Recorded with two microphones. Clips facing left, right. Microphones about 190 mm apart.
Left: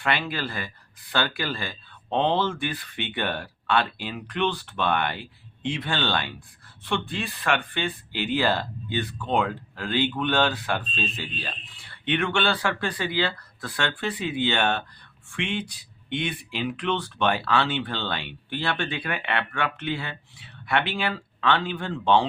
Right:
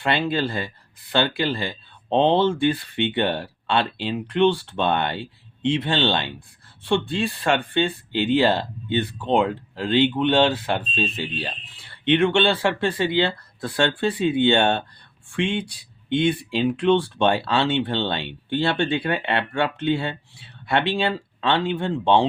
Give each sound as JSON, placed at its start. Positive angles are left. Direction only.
{"t": 0.0, "sound": "speech", "side_deg": -25}